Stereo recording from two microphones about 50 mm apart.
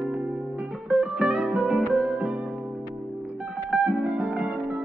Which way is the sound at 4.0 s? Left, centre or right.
Right.